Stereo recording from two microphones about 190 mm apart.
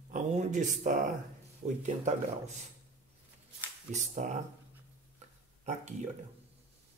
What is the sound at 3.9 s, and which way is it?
Speech, 40° right (ahead or behind).